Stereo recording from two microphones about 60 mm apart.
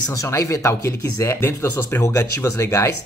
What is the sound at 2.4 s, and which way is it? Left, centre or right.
Speech, left.